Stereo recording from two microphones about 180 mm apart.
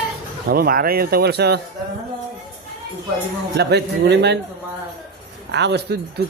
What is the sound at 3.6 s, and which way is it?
Speech, 70° right (ahead or behind).